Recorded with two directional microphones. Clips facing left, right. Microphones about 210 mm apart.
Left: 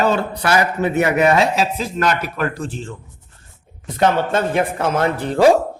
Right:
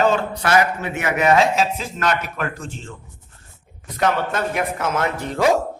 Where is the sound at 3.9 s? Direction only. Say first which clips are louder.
Left 4 dB; 25° left (ahead or behind).